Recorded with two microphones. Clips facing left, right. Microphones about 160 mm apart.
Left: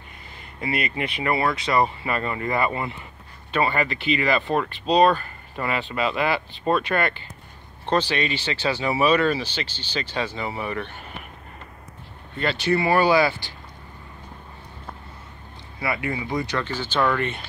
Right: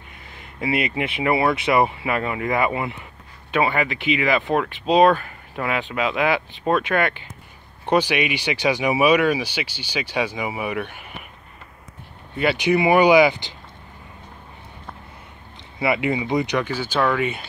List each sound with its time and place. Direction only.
0.7 s speech: 20° right (ahead or behind)
2.0 s speech: 10° right (ahead or behind)
12.4 s speech: 15° right (ahead or behind)
15.8 s speech: 20° right (ahead or behind)